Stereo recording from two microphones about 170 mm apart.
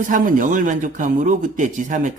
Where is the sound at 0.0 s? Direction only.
50° right (ahead or behind).